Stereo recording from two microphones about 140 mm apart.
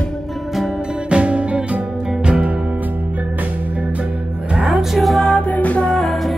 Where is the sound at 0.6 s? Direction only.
5° right (ahead or behind).